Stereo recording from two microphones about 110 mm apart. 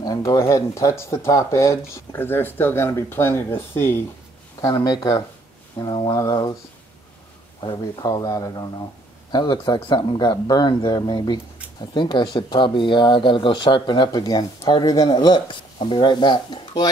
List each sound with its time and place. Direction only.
0.0 s speech: 35° left (ahead or behind)
4.6 s speech: 35° left (ahead or behind)
7.6 s speech: 40° left (ahead or behind)